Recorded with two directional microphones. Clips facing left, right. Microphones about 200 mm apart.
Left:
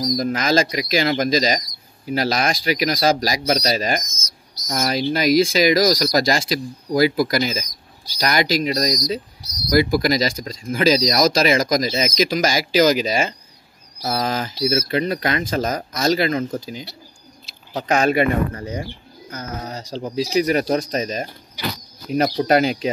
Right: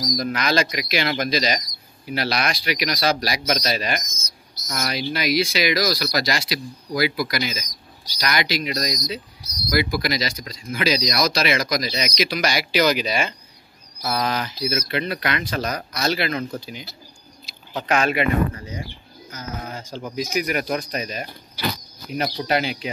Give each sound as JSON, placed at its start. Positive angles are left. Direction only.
{"t": 0.2, "sound": "speech", "side_deg": 40}
{"t": 14.7, "sound": "speech", "side_deg": 30}
{"t": 19.6, "sound": "speech", "side_deg": 40}